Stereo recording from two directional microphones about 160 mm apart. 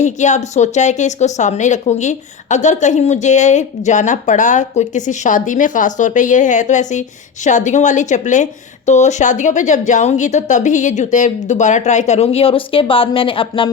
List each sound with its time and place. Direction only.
0.0 s a woman's voice: 50° left (ahead or behind); by 13.7 s 35° left (ahead or behind)